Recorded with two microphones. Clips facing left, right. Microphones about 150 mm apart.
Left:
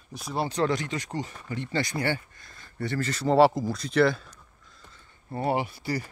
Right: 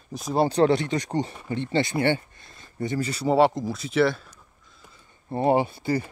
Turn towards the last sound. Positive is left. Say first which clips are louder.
# right 5 dB
turn(degrees=-25)  # may be behind; listen again after turning